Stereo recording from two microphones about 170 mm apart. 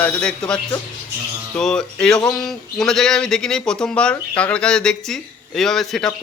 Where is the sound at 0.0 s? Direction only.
5° left (ahead or behind).